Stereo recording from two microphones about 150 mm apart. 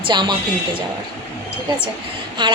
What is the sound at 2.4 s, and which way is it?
Speech, 30° right (ahead or behind).